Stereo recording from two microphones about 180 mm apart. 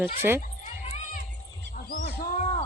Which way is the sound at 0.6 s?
45° left (ahead or behind).